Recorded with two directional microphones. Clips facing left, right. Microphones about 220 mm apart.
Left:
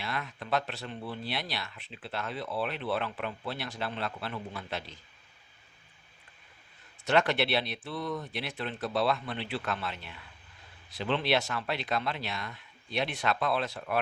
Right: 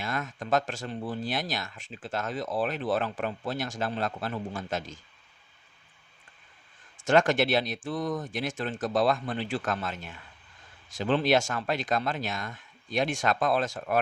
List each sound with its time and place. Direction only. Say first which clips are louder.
0.0 s speech: right 4 dB; 45° right (ahead or behind)
7.0 s speech: right 4 dB; 45° right (ahead or behind)